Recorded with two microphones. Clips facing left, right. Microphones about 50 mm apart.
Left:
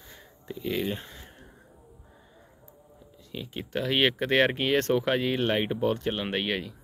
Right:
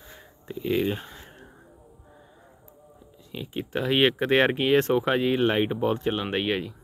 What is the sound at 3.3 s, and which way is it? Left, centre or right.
Speech, centre.